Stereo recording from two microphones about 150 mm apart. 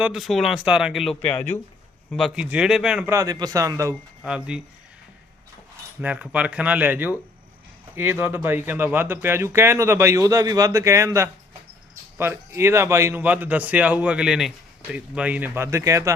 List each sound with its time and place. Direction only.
0.0 s speech: centre (ahead or behind)
3.1 s a man's voice: 20° right (ahead or behind)
4.2 s speech: 5° right (ahead or behind)
6.0 s speech: 10° right (ahead or behind)